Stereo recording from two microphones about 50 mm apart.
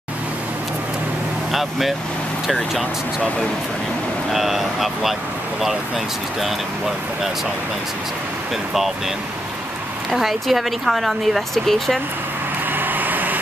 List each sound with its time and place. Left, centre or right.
1.5 s speech: centre
4.3 s speech: centre
10.1 s speech: centre
12.7 s vehicle: right